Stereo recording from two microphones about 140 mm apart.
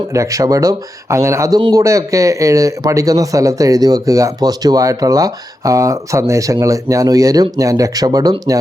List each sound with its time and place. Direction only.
0.1 s speech: 20° right (ahead or behind)